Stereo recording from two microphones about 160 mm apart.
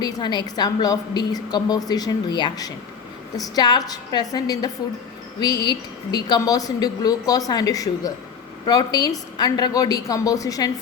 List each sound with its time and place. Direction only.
0.0 s a woman's voice: 25° left (ahead or behind)